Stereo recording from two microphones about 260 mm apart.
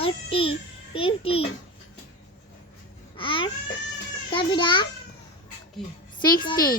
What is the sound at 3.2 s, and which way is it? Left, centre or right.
A child's voice, centre.